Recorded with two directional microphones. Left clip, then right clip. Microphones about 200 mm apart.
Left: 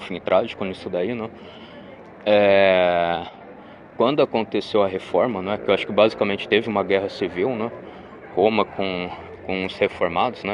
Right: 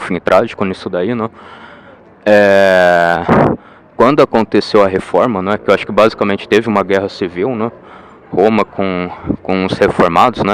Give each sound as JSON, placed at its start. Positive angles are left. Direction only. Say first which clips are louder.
{"t": 0.0, "sound": "speech", "louder": "right 9 dB", "side_deg": -40}